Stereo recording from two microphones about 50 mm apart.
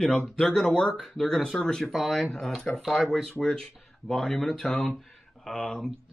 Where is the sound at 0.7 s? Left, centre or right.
Centre.